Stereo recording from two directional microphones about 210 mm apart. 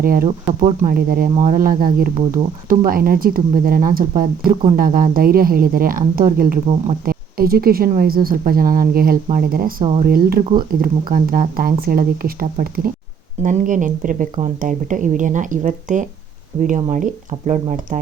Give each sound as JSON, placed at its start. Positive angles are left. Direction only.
{"t": 0.0, "sound": "speech", "side_deg": -45}
{"t": 0.3, "sound": "speech", "side_deg": -30}
{"t": 9.8, "sound": "speech", "side_deg": -25}
{"t": 10.1, "sound": "speech", "side_deg": -45}